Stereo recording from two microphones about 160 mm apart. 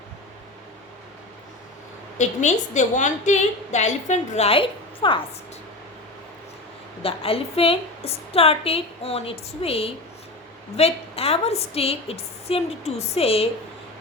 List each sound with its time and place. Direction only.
2.1 s a woman's voice: 50° left (ahead or behind); by 5.2 s 30° left (ahead or behind)
7.0 s a woman's voice: 35° left (ahead or behind)